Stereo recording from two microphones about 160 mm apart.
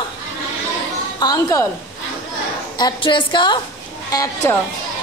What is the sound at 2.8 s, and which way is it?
A woman's voice, 30° left (ahead or behind).